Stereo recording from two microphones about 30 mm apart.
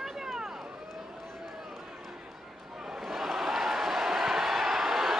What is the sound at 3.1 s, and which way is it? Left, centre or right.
Crowd, centre.